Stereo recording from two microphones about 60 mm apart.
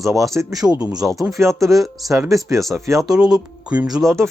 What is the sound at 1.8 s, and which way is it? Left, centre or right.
Speech, centre.